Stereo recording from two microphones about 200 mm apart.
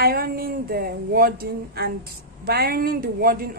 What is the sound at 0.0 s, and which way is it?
A woman's voice, 50° right (ahead or behind).